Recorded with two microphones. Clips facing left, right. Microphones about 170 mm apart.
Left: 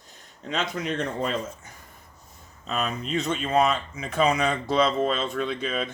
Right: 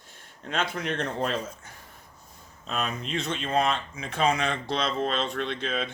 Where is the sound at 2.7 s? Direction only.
45° left (ahead or behind).